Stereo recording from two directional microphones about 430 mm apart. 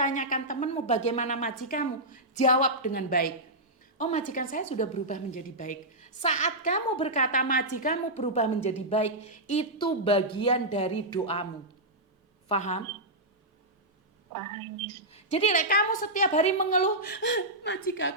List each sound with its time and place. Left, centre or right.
0.0 s a woman's voice: centre
12.5 s a woman's voice: centre
15.1 s a woman's voice: centre